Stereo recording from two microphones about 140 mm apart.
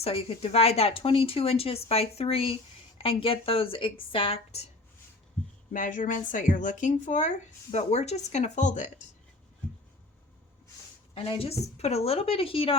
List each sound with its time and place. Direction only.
0.0 s speech: 45° left (ahead or behind)
5.7 s speech: 70° left (ahead or behind)
11.1 s speech: 45° left (ahead or behind)